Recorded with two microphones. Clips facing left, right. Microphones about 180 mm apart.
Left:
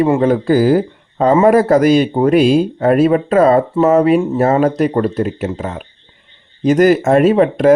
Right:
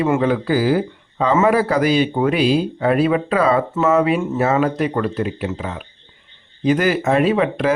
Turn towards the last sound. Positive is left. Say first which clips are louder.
# left 6 dB
turn(degrees=45)  # may be behind; listen again after turning